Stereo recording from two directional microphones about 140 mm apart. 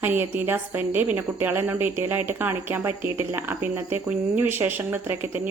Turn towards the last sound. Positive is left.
turn(degrees=-15)  # may be behind; listen again after turning